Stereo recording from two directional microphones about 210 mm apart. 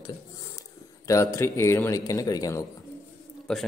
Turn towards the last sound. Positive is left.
turn(degrees=5)  # may be behind; listen again after turning